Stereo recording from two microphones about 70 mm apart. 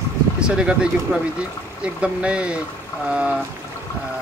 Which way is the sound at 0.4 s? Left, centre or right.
Centre.